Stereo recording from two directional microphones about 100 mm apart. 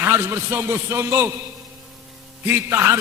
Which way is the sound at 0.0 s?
25° right (ahead or behind).